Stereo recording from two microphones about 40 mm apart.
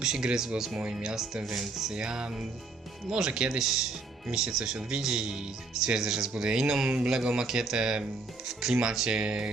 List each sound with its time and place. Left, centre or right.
0.0 s speech: centre
1.9 s music: centre
3.2 s speech: centre
9.0 s music: centre